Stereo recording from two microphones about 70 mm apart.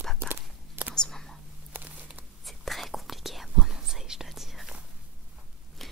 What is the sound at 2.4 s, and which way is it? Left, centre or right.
Whispering, centre.